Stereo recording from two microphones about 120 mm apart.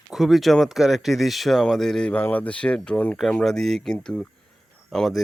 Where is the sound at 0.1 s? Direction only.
Centre (ahead or behind).